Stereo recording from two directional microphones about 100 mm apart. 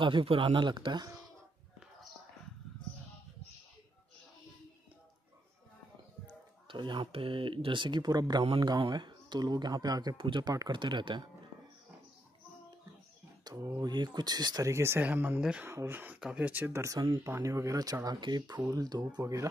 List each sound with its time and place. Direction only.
0.0 s speech: 60° right (ahead or behind)
6.2 s speech: 50° right (ahead or behind)
10.1 s speech: 50° right (ahead or behind)
13.7 s speech: 45° right (ahead or behind)
14.7 s speech: 25° right (ahead or behind)
18.0 s speech: 45° right (ahead or behind)